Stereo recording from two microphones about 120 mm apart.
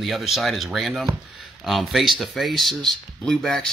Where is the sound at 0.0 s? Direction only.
Centre (ahead or behind).